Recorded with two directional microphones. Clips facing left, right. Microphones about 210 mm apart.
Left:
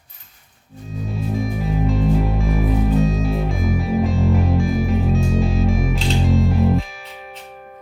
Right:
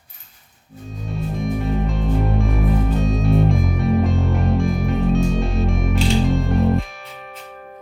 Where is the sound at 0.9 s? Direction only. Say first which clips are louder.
Left 3 dB; centre (ahead or behind).